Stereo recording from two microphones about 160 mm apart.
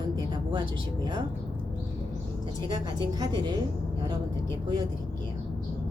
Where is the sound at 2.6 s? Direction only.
25° right (ahead or behind).